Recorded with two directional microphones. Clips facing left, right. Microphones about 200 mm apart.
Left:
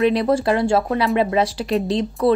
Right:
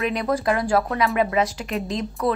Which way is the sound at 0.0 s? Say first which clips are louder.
Left 6 dB; 30° left (ahead or behind).